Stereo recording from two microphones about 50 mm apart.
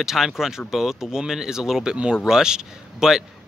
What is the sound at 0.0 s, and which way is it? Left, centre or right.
A man's voice, centre.